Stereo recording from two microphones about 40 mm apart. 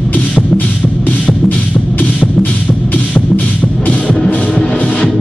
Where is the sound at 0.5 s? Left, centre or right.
Left.